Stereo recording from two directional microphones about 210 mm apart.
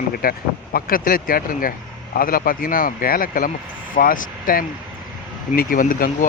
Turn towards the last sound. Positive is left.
turn(degrees=40)  # may be behind; listen again after turning